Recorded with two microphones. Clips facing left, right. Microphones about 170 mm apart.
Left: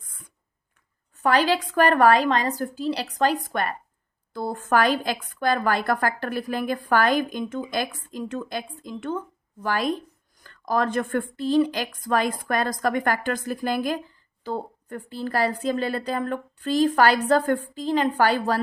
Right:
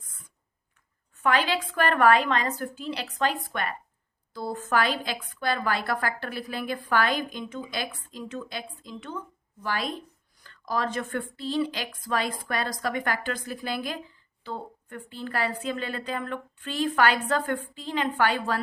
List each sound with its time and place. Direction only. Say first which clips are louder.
1.1 s a woman's voice: left 4 dB; 40° left (ahead or behind)